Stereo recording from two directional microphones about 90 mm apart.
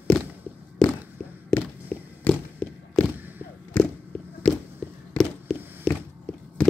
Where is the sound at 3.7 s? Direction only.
15° left (ahead or behind).